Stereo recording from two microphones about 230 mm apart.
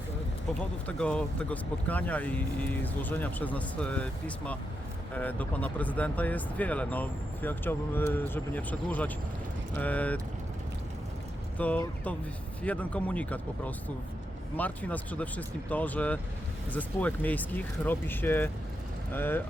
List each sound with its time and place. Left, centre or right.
0.6 s speech: centre
11.5 s speech: centre